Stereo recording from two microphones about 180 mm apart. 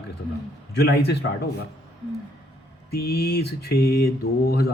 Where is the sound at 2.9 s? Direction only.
60° left (ahead or behind).